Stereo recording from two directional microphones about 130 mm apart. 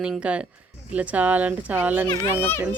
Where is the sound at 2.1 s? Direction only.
20° left (ahead or behind).